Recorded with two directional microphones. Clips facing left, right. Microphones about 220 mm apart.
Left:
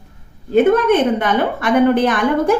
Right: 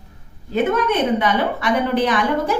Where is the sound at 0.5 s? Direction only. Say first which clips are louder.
Left 6 dB; 50° left (ahead or behind).